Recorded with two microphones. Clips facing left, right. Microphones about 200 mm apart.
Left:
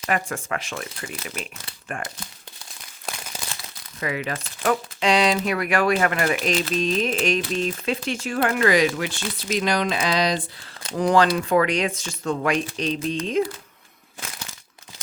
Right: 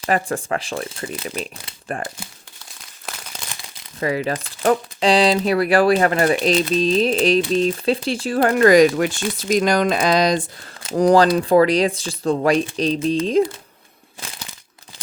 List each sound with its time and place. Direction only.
0.0 s speech: 35° right (ahead or behind)
4.0 s speech: 35° right (ahead or behind)